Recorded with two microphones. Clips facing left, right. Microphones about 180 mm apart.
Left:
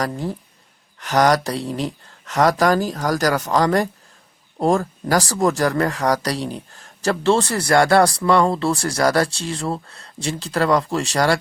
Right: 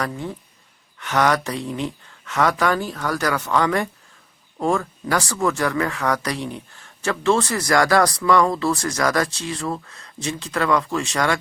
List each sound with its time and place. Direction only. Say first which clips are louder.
0.0 s speech: left 3 dB; 35° left (ahead or behind)